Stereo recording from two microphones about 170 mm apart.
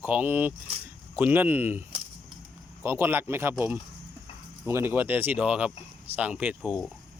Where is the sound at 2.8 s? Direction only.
15° right (ahead or behind).